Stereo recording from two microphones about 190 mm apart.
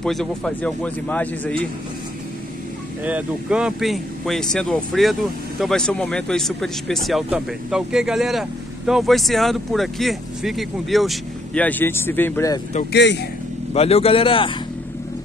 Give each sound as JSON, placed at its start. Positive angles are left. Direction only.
{"t": 0.0, "sound": "speech", "side_deg": 5}
{"t": 3.0, "sound": "speech", "side_deg": -10}
{"t": 12.9, "sound": "speech", "side_deg": 65}
{"t": 13.7, "sound": "a man's voice", "side_deg": 30}